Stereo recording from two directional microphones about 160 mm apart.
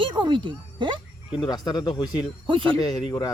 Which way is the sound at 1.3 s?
25° left (ahead or behind).